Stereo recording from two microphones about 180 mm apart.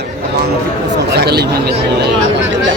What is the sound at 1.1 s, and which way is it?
Speech, 65° right (ahead or behind).